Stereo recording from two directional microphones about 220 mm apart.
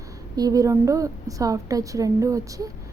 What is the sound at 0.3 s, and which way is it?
A woman's voice, 15° right (ahead or behind).